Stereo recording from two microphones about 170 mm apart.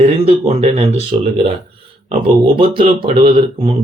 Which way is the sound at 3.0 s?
30° right (ahead or behind).